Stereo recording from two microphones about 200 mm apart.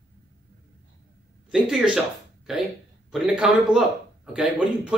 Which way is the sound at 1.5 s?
5° right (ahead or behind).